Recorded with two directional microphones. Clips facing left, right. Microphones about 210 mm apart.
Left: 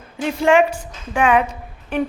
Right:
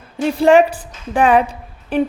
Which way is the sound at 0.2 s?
35° right (ahead or behind).